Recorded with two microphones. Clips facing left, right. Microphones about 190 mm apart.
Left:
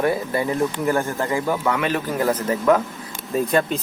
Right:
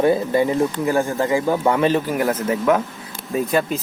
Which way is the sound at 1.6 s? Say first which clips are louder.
Right 7 dB; 30° right (ahead or behind).